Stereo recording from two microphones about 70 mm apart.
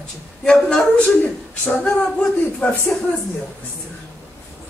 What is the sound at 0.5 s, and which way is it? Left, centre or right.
Speech, centre.